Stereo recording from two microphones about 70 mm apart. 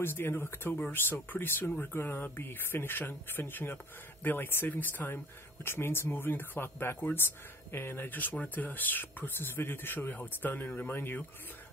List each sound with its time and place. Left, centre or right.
0.0 s speech: left